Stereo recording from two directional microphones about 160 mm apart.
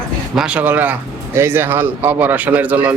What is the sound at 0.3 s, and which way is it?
Speech, 5° right (ahead or behind).